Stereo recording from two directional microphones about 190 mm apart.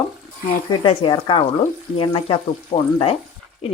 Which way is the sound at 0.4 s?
25° left (ahead or behind).